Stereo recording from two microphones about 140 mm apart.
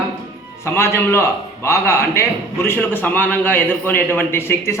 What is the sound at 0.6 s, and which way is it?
A man's voice, 15° left (ahead or behind).